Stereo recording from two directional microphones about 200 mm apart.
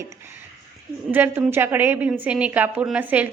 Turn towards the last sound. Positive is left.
turn(degrees=-10)  # may be behind; listen again after turning